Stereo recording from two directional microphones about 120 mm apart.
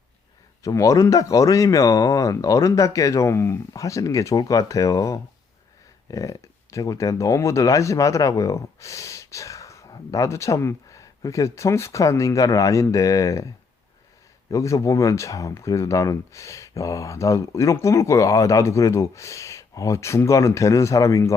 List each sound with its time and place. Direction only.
0.6 s speech: 25° left (ahead or behind)
14.5 s speech: 25° left (ahead or behind)